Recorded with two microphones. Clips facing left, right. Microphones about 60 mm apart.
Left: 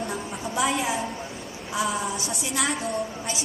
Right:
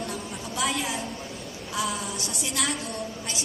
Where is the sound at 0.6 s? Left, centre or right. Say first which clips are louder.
Left 3 dB; centre.